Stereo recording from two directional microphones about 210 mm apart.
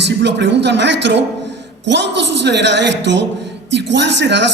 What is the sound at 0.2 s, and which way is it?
A man's voice, 55° right (ahead or behind).